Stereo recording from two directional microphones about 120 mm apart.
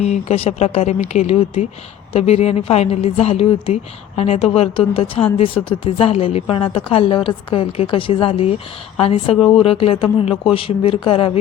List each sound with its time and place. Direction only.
0.0 s a woman's voice: 65° left (ahead or behind); by 11.3 s 50° left (ahead or behind)